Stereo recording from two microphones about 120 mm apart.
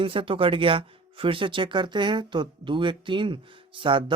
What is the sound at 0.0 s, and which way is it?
Speech, 45° right (ahead or behind).